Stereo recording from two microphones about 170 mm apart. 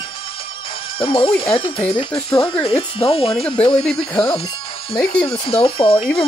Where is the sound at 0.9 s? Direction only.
30° left (ahead or behind).